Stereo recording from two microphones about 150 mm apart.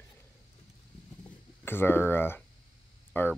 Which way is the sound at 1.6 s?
15° left (ahead or behind).